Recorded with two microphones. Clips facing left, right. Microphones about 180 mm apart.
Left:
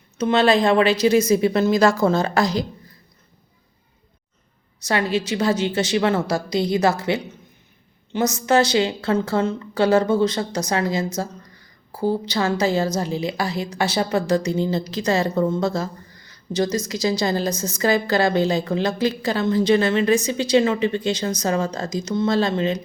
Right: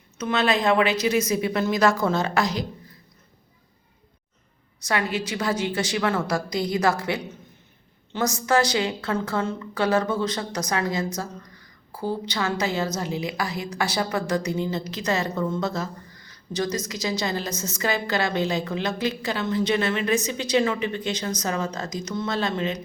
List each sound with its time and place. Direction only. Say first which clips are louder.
0.2 s a woman's voice: left 6 dB; 30° left (ahead or behind)
4.9 s a woman's voice: left 4 dB; 30° left (ahead or behind)